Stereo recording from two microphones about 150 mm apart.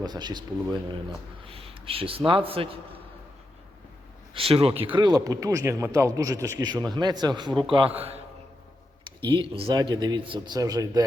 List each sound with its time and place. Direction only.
0.0 s a man's voice: 30° right (ahead or behind)
4.4 s a man's voice: 40° right (ahead or behind)